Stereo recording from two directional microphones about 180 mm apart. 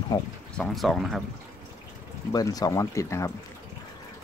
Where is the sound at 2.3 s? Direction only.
20° left (ahead or behind).